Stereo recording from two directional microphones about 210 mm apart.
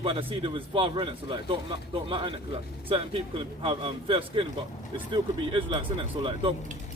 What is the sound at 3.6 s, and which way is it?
Speech, 25° right (ahead or behind).